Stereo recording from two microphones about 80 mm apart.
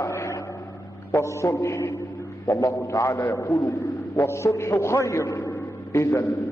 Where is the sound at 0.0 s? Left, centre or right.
Left.